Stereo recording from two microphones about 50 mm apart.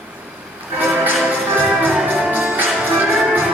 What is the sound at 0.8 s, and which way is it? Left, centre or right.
Music, right.